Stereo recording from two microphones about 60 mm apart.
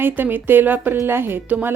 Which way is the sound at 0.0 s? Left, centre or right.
Right.